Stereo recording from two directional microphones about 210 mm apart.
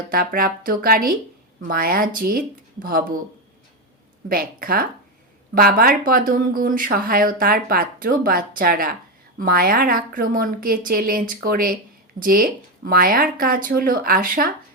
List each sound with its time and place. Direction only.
0.1 s speech: 45° right (ahead or behind)
4.3 s speech: 45° right (ahead or behind)